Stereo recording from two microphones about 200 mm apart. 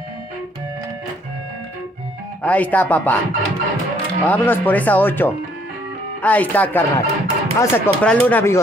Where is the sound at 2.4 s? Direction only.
5° left (ahead or behind).